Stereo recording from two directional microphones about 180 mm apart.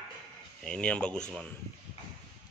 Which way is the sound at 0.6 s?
5° left (ahead or behind).